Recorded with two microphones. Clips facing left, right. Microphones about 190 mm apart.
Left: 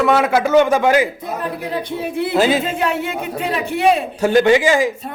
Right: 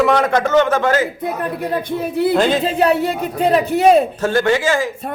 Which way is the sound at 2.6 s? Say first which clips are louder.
Right 5 dB; 35° right (ahead or behind).